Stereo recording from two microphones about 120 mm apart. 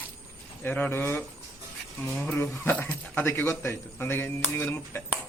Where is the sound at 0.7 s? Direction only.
15° left (ahead or behind).